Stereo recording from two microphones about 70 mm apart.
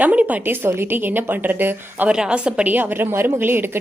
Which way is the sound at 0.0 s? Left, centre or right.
Right.